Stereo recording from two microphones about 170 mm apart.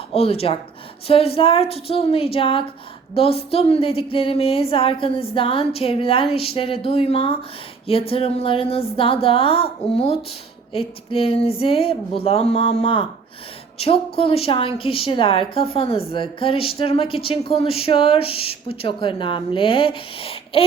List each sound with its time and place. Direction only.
0.1 s speech: 35° left (ahead or behind)